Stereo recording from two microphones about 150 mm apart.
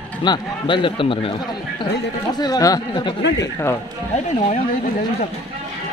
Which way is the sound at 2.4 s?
25° left (ahead or behind).